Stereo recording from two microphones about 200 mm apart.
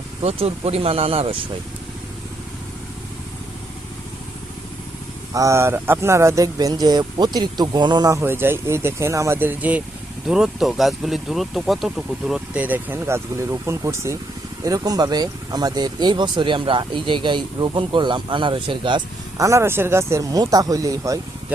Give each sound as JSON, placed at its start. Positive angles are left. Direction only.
{"t": 0.2, "sound": "speech", "side_deg": -30}
{"t": 5.3, "sound": "speech", "side_deg": -15}